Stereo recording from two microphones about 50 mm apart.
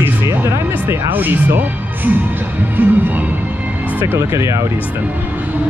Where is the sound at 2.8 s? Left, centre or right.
Right.